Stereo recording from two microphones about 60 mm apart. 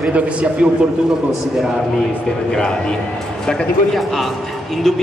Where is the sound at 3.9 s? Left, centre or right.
Centre.